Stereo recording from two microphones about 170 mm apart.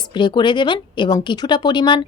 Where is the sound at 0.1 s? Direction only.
25° left (ahead or behind).